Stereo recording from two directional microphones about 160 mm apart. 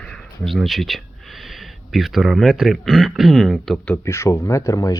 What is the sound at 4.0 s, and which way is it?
Speech, 15° left (ahead or behind).